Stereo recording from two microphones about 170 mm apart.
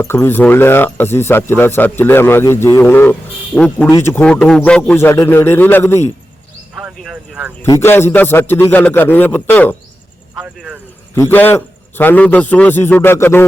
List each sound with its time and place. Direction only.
0.0 s speech: 15° left (ahead or behind)
6.8 s speech: 5° right (ahead or behind)
7.6 s speech: 15° left (ahead or behind)
10.4 s a sound: 5° right (ahead or behind)
11.1 s speech: 15° left (ahead or behind)